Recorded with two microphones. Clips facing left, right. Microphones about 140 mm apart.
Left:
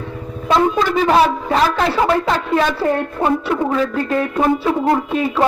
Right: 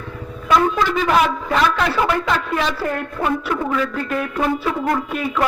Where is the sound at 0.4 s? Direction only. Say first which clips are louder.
Left 2 dB; 30° left (ahead or behind).